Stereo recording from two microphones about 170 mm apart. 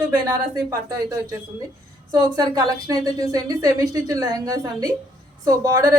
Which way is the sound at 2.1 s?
25° right (ahead or behind).